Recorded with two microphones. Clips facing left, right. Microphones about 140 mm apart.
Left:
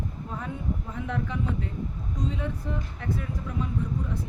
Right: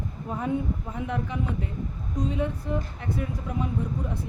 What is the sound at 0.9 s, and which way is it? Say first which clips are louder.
Speech: right 1 dB; 15° right (ahead or behind).